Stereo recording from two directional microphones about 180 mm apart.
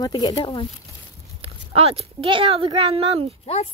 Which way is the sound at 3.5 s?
35° left (ahead or behind).